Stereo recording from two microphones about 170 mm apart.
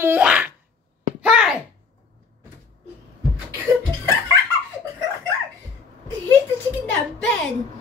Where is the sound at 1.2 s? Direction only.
5° right (ahead or behind).